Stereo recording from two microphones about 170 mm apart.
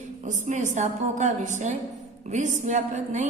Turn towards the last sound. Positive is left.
turn(degrees=-45)  # may be behind; listen again after turning